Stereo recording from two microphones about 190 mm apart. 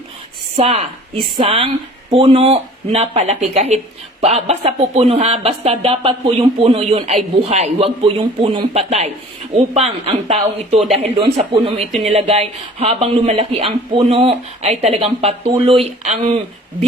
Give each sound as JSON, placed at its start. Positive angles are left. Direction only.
{"t": 0.5, "sound": "speech", "side_deg": -35}